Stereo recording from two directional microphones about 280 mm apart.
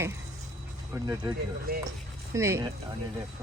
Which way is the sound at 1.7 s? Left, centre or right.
Right.